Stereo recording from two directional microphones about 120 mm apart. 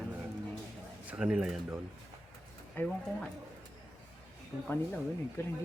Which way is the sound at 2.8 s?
15° left (ahead or behind).